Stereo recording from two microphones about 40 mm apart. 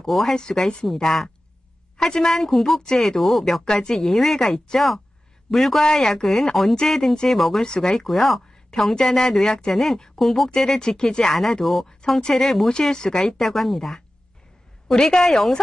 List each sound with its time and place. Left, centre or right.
0.0 s speech: centre
0.4 s a woman's voice: left
0.9 s speech: centre
3.2 s speech: centre
3.6 s speech: centre
7.6 s a woman's voice: left
8.0 s speech: centre
8.6 s speech: centre
10.5 s speech: centre
12.2 s speech: centre